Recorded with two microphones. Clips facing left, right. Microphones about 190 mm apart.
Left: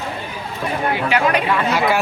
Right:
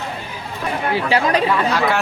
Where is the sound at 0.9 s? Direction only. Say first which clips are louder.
Right 1 dB; 35° right (ahead or behind).